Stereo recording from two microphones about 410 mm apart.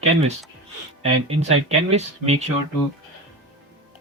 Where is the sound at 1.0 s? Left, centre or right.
Centre.